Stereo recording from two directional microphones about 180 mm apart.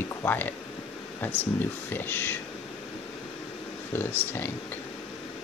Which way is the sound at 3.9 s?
10° left (ahead or behind).